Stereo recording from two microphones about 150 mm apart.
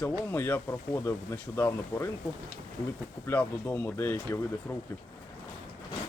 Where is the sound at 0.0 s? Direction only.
15° left (ahead or behind).